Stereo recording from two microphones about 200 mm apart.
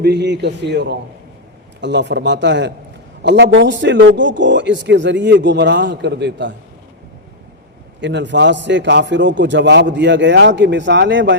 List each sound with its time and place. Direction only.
0.0 s a man's voice: 55° right (ahead or behind)
8.0 s a man's voice: 60° right (ahead or behind)